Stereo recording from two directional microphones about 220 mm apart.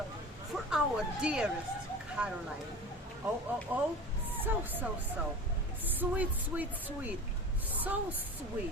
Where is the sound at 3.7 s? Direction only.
5° right (ahead or behind).